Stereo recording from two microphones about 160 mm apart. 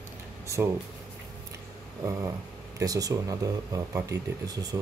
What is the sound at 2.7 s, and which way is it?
Speech, 20° right (ahead or behind).